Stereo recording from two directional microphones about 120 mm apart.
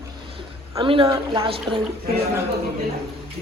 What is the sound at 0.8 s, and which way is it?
Speech, 45° right (ahead or behind).